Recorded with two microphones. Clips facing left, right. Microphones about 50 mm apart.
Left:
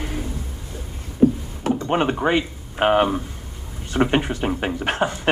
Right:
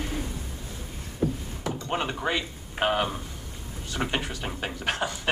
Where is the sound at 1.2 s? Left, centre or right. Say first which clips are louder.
Left 11 dB; left.